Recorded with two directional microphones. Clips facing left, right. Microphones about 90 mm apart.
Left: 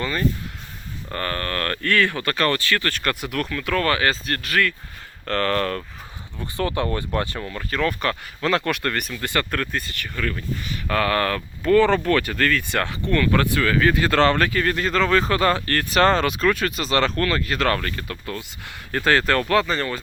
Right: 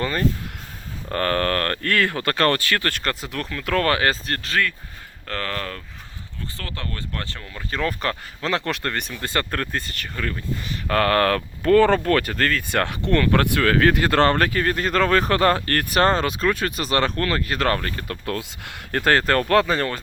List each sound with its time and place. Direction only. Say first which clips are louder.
0.0 s speech: right 1 dB; 40° right (ahead or behind)
1.1 s speech: right 6 dB; 65° right (ahead or behind)
1.5 s speech: even; 40° right (ahead or behind); by 3.6 s 25° right (ahead or behind)
3.6 s speech: right 2 dB; 45° right (ahead or behind)
5.3 s speech: left 7 dB; 5° right (ahead or behind)
6.4 s speech: left 10 dB; 15° left (ahead or behind)
7.7 s speech: left 1 dB; 30° right (ahead or behind)
8.4 s speech: left 2 dB; 20° right (ahead or behind)
10.8 s speech: right 3 dB; 45° right (ahead or behind)
13.1 s speech: right 1 dB; 50° right (ahead or behind)
14.1 s speech: even; 40° right (ahead or behind)
16.0 s speech: left 1 dB; 35° right (ahead or behind)
18.9 s speech: even; 50° right (ahead or behind)